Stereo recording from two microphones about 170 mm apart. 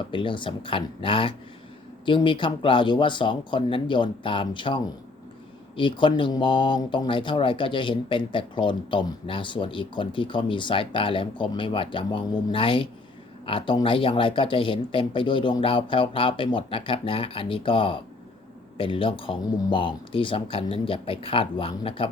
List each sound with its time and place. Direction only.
0.1 s speech: 30° left (ahead or behind)